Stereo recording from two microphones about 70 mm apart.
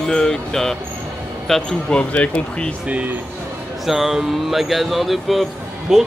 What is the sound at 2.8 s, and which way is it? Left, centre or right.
Speech, centre.